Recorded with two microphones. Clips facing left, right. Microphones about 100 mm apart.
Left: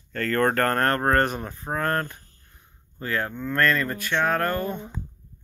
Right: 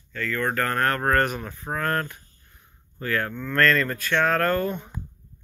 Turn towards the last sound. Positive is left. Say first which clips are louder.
# right 2 dB
turn(degrees=15)  # may be behind; listen again after turning